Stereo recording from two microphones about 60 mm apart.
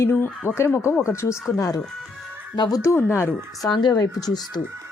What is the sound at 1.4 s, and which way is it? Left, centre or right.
Speech, left.